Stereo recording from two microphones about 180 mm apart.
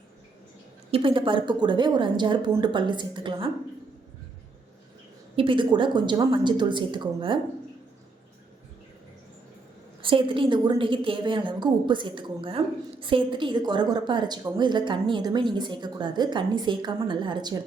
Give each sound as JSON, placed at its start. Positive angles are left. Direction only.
{"t": 0.9, "sound": "a woman's voice", "side_deg": -30}
{"t": 5.4, "sound": "a woman's voice", "side_deg": -25}
{"t": 10.0, "sound": "a woman's voice", "side_deg": -30}